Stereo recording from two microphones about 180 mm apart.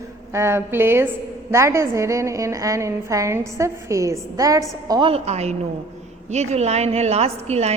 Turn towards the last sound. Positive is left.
turn(degrees=-35)  # may be behind; listen again after turning